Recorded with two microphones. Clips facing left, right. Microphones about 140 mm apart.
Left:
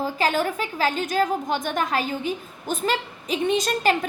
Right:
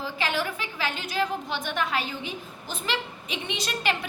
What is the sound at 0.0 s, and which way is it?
A woman's voice, 45° left (ahead or behind).